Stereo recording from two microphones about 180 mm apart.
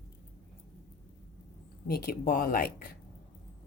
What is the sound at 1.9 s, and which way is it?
Speech, 55° left (ahead or behind).